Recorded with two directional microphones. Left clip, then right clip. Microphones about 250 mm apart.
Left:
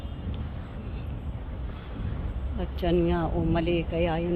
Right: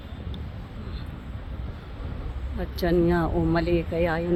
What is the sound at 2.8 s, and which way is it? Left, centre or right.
Speech, right.